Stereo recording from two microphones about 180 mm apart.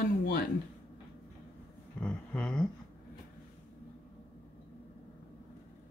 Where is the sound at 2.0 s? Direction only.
5° left (ahead or behind).